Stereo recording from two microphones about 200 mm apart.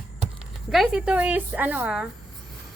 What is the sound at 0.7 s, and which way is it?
A woman's voice, centre (ahead or behind).